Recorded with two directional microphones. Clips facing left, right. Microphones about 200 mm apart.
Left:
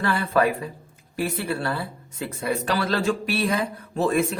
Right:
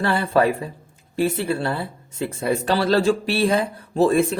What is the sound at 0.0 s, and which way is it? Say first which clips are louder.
Speech: right 3 dB; 30° right (ahead or behind).